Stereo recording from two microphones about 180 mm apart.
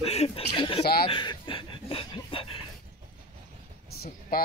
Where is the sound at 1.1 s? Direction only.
30° left (ahead or behind).